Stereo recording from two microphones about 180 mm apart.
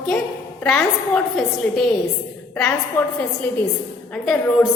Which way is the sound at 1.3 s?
Centre (ahead or behind).